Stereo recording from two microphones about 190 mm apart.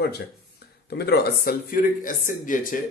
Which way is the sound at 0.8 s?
60° left (ahead or behind).